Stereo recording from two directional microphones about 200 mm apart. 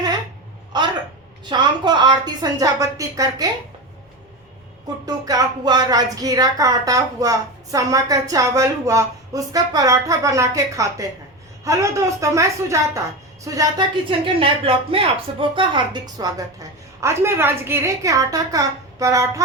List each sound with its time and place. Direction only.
0.7 s a sound: 20° right (ahead or behind)
1.5 s a woman's voice: 20° right (ahead or behind)
5.0 s speech: 20° right (ahead or behind)
14.3 s speech: 25° right (ahead or behind)